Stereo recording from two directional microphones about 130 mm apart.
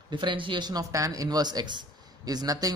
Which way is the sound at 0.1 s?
40° right (ahead or behind).